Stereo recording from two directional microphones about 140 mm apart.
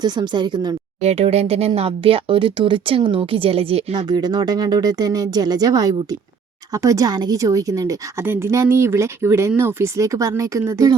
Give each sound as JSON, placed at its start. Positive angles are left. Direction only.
{"t": 0.0, "sound": "speech", "side_deg": -30}
{"t": 1.0, "sound": "speech", "side_deg": -50}
{"t": 4.1, "sound": "a woman's voice", "side_deg": -30}